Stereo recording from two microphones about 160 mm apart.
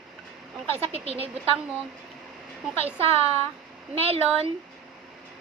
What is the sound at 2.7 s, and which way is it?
A woman's voice, 40° right (ahead or behind).